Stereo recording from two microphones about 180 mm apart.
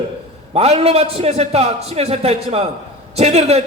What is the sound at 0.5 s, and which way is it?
A man's voice, 35° right (ahead or behind).